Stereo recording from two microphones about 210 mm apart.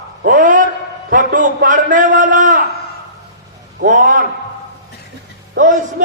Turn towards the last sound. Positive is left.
turn(degrees=-40)  # may be behind; listen again after turning